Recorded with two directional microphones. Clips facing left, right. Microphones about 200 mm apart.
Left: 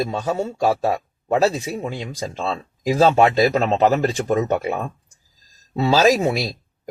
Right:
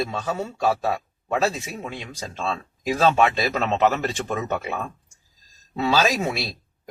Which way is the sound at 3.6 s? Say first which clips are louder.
Left 4 dB; 40° left (ahead or behind).